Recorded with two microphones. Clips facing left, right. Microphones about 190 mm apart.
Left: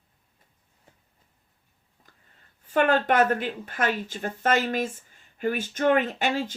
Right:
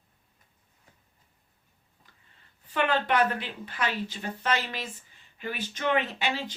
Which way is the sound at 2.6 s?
45° left (ahead or behind).